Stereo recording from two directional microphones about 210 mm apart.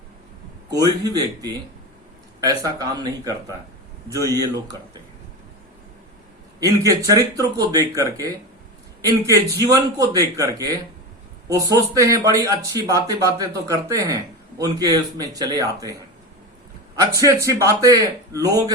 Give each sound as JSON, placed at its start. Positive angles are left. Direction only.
{"t": 0.7, "sound": "speech", "side_deg": -20}
{"t": 6.6, "sound": "speech", "side_deg": -15}
{"t": 17.4, "sound": "speech", "side_deg": -15}